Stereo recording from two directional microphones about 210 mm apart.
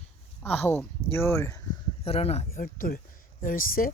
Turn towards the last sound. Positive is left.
turn(degrees=40)  # may be behind; listen again after turning